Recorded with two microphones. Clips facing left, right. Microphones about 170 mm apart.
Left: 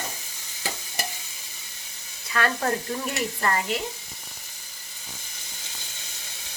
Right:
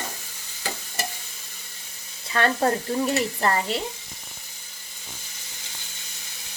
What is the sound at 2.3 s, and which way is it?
Frying, 30° right (ahead or behind).